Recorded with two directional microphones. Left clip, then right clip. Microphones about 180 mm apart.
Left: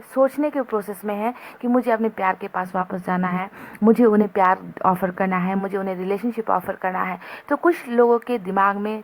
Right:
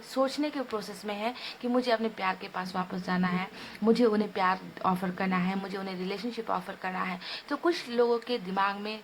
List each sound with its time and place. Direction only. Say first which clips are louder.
0.1 s speech: left 10 dB; 35° left (ahead or behind)